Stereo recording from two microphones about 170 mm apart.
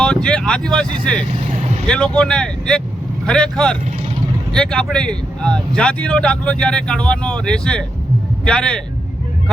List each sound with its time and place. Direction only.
0.0 s vehicle: 5° left (ahead or behind)
1.9 s speech: 5° left (ahead or behind)